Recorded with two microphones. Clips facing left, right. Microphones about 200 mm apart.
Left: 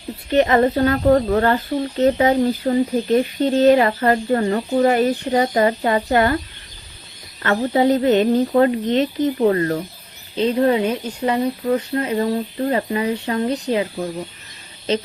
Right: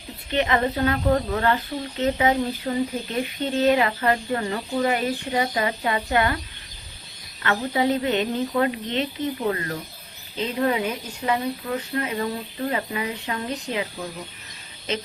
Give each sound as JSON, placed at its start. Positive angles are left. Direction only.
{"t": 0.3, "sound": "speech", "side_deg": 40}
{"t": 7.4, "sound": "speech", "side_deg": 45}